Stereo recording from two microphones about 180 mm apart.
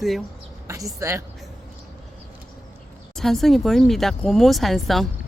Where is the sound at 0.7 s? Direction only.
15° right (ahead or behind).